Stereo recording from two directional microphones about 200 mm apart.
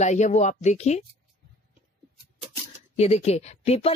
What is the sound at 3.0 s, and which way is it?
Speech, 30° left (ahead or behind).